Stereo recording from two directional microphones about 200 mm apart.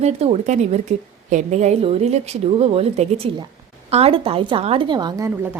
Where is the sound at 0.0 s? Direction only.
30° right (ahead or behind).